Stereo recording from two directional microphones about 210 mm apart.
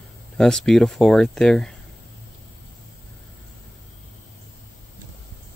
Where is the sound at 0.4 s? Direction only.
5° left (ahead or behind).